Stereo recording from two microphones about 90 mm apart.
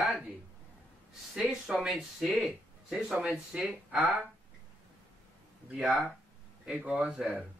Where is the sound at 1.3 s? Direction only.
5° right (ahead or behind).